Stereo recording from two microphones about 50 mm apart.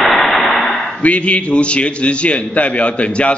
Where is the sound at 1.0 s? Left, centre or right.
Left.